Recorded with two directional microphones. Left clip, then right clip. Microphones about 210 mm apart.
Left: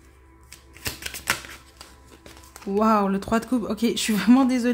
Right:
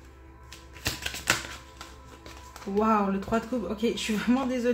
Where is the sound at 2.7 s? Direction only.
55° left (ahead or behind).